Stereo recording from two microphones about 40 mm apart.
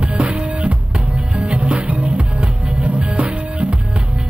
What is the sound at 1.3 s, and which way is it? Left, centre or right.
Music, right.